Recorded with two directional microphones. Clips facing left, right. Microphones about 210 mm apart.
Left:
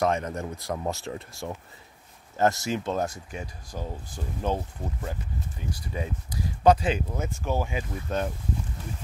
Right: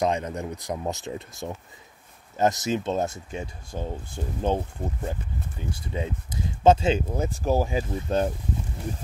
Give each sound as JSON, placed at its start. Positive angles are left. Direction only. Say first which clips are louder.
{"t": 0.0, "sound": "speech", "louder": "right 1 dB", "side_deg": -20}
{"t": 5.6, "sound": "speech", "louder": "right 3 dB", "side_deg": -25}